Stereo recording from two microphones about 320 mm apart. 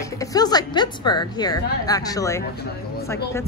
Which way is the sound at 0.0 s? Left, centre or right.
Centre.